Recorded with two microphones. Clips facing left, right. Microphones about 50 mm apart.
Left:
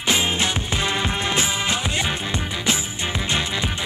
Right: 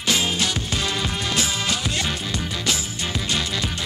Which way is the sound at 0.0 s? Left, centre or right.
Left.